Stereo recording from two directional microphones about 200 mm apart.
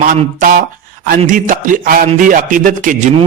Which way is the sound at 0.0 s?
40° right (ahead or behind).